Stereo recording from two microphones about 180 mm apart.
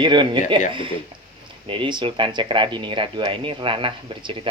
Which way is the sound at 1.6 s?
25° right (ahead or behind).